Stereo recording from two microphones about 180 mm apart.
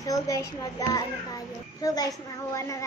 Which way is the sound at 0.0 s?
20° left (ahead or behind).